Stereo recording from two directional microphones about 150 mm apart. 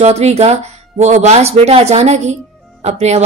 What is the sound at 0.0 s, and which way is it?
A woman's voice, 45° right (ahead or behind).